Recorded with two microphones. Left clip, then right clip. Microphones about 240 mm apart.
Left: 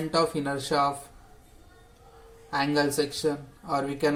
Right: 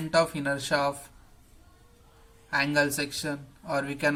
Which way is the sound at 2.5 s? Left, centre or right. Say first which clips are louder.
Even; right.